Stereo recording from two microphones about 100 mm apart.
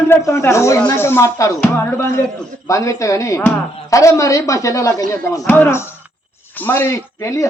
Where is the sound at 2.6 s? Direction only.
30° left (ahead or behind).